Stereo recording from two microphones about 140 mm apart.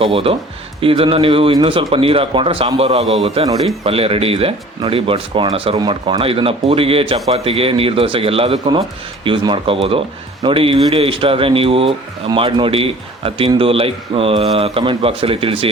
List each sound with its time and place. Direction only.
0.0 s speech: 45° right (ahead or behind)